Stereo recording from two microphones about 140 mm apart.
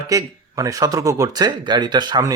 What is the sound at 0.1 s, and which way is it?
A man's voice, 25° right (ahead or behind).